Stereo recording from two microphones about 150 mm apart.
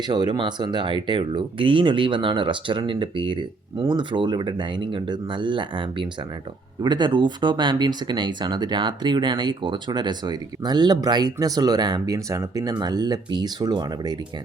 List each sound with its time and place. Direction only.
0.1 s speech: 30° right (ahead or behind)